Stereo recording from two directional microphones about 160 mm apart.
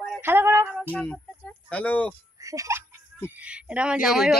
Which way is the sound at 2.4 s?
20° right (ahead or behind).